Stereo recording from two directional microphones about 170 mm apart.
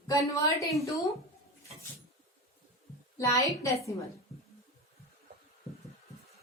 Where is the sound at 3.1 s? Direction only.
20° left (ahead or behind).